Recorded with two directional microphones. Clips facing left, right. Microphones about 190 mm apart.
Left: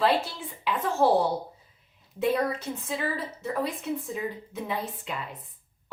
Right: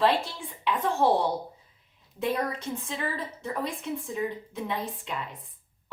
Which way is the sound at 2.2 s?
5° left (ahead or behind).